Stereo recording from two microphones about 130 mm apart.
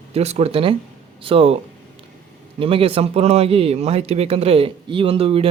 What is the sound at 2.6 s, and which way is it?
Speech, 45° right (ahead or behind).